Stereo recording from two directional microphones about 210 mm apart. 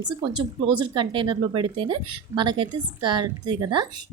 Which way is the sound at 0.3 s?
20° right (ahead or behind).